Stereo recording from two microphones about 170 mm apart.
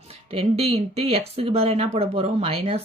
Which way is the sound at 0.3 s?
35° right (ahead or behind).